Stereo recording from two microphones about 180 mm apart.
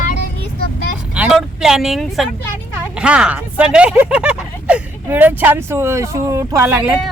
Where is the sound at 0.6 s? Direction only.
60° left (ahead or behind).